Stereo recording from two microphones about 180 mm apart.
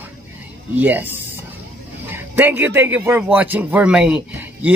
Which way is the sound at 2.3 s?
10° right (ahead or behind).